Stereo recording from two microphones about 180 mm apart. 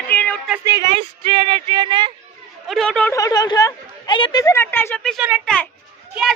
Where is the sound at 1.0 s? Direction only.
30° right (ahead or behind).